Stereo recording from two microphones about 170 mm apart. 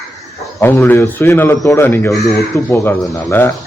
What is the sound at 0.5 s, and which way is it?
Speech, 15° left (ahead or behind).